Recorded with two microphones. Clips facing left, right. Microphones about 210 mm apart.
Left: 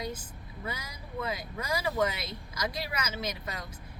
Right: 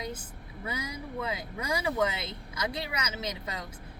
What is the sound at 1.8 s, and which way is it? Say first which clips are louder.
Speech: even; 25° right (ahead or behind).